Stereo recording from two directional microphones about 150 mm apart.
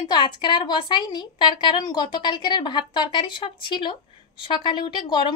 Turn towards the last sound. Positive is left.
turn(degrees=30)  # may be behind; listen again after turning